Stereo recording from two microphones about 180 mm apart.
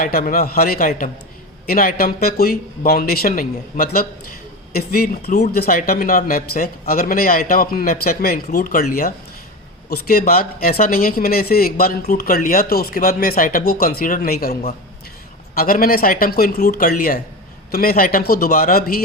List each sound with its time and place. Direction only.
0.0 s speech: 50° left (ahead or behind)